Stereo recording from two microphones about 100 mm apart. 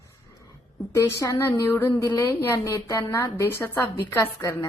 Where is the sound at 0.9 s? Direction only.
30° left (ahead or behind).